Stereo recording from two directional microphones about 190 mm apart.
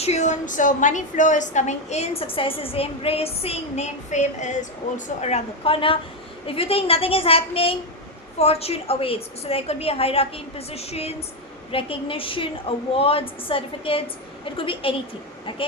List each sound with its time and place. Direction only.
0.0 s a woman's voice: 35° left (ahead or behind)